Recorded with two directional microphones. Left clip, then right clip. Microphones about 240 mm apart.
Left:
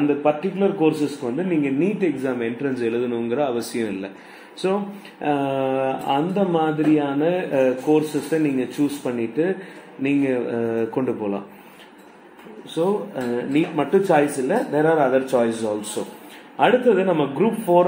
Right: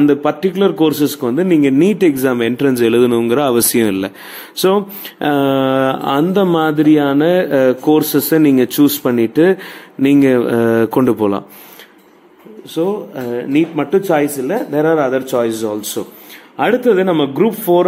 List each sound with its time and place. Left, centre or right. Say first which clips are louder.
0.2 s a man's voice: right 6 dB; right
5.2 s speech: right 8 dB; right
12.7 s a man's voice: right 4 dB; right